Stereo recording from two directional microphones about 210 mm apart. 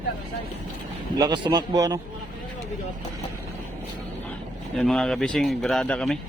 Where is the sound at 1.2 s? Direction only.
20° right (ahead or behind).